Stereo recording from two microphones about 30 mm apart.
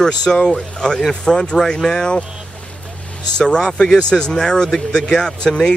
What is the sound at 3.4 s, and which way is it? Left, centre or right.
Speech, left.